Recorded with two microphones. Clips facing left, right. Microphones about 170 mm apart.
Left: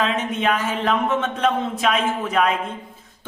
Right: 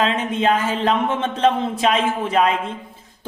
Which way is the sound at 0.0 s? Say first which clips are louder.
Right 2 dB; 30° right (ahead or behind).